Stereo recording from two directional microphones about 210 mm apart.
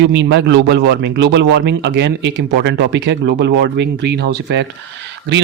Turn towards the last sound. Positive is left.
turn(degrees=-60)  # may be behind; listen again after turning